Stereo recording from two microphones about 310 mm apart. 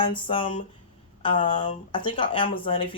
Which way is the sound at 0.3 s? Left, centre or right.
Centre.